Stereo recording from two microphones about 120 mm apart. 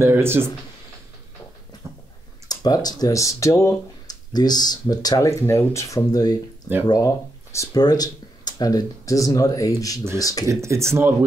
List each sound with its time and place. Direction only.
0.0 s speech: 20° right (ahead or behind)
2.4 s speech: 35° left (ahead or behind)
4.3 s speech: 35° left (ahead or behind)
5.9 s speech: 35° left (ahead or behind)
10.4 s speech: 25° right (ahead or behind)